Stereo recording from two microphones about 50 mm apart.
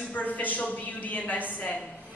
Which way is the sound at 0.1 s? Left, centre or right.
Left.